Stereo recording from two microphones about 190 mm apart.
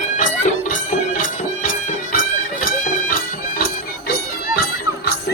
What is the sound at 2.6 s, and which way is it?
Music, 45° left (ahead or behind).